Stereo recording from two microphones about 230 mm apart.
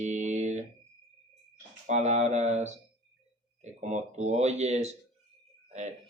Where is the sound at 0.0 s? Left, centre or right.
Right.